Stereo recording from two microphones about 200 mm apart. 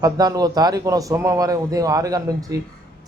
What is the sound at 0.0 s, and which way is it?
A man's voice, 20° right (ahead or behind).